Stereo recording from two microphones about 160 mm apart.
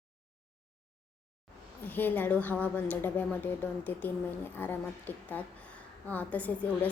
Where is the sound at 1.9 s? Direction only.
10° left (ahead or behind).